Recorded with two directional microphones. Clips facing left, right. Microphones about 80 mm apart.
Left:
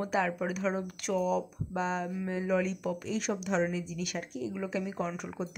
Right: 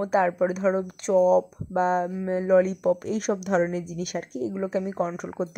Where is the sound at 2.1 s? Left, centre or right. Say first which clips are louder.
Right 10 dB; right.